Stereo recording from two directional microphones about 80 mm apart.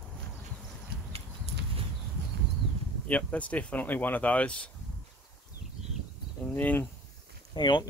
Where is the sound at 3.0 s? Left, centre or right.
Centre.